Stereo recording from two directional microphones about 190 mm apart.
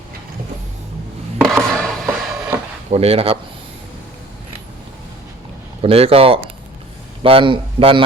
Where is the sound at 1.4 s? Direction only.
5° left (ahead or behind).